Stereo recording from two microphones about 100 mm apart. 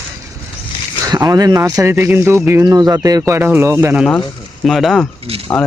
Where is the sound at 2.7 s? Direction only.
40° right (ahead or behind).